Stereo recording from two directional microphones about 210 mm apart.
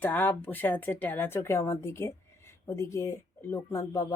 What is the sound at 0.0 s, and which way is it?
Speech, 10° left (ahead or behind).